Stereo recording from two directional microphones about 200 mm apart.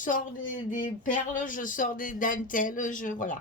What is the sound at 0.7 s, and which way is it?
Speech, 40° left (ahead or behind).